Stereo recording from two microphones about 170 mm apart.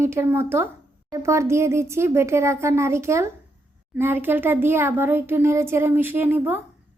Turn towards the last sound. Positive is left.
turn(degrees=-10)  # may be behind; listen again after turning